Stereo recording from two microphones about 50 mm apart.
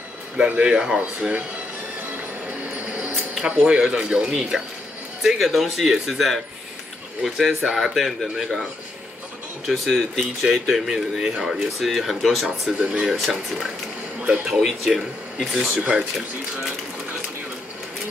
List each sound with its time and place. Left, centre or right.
0.7 s speech: centre
3.4 s speech: centre
5.2 s speech: centre
9.7 s speech: centre
11.8 s speech: centre
12.7 s speech: right
13.2 s speech: centre
14.2 s speech: centre
14.6 s speech: centre
15.8 s speech: right